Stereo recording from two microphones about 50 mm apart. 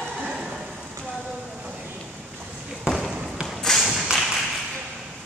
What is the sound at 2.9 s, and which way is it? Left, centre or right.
Basketball bounce, centre.